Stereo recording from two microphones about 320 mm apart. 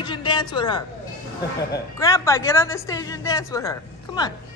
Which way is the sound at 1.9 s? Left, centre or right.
Centre.